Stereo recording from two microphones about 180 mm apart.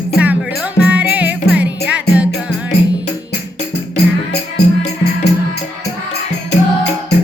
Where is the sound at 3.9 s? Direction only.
65° left (ahead or behind).